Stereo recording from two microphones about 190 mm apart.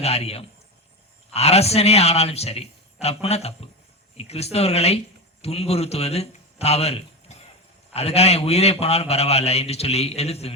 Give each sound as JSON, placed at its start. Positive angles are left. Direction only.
{"t": 0.0, "sound": "a man's voice", "side_deg": 30}